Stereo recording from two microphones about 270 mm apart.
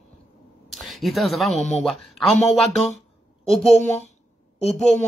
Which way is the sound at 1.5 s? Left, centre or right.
Left.